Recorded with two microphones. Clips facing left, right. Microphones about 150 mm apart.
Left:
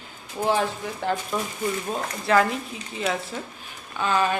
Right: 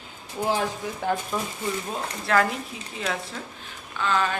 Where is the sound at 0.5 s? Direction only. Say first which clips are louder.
Left 2 dB; 10° right (ahead or behind).